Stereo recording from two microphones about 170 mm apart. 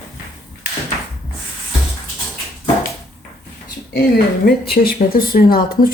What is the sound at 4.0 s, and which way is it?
Speech, 65° left (ahead or behind).